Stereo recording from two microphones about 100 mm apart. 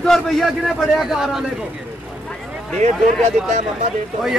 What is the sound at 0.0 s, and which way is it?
A man's voice, 5° left (ahead or behind).